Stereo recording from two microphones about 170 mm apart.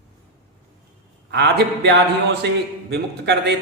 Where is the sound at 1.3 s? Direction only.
80° right.